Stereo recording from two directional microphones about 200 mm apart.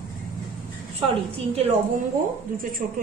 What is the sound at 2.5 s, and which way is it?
Speech, 45° right (ahead or behind).